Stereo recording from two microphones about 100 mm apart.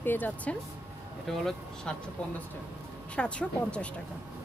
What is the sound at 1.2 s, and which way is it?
Speech, 5° left (ahead or behind).